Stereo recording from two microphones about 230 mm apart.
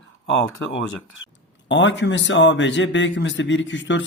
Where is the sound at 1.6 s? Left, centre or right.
Left.